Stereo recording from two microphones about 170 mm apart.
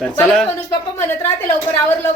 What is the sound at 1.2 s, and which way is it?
Speech, 15° left (ahead or behind).